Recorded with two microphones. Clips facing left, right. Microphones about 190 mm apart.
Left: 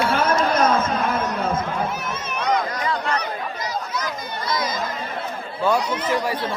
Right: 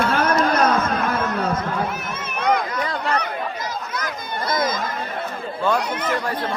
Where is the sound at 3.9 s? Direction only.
50° right (ahead or behind).